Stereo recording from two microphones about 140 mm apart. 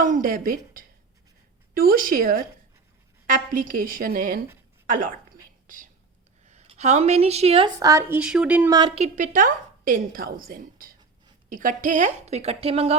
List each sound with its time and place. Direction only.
0.0 s a woman's voice: 75° right (ahead or behind)
3.2 s a woman's voice: 75° right (ahead or behind)
5.6 s speech: 75° right (ahead or behind)
6.5 s a woman's voice: 50° right (ahead or behind)
7.8 s a woman's voice: 25° right (ahead or behind)
9.0 s a woman's voice: 65° right (ahead or behind); by 10.9 s 90° right
11.4 s a woman's voice: 75° right (ahead or behind); by 13.0 s 45° right (ahead or behind)